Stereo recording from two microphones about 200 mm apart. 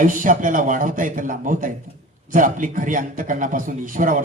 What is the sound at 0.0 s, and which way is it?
A man's voice, 40° right (ahead or behind).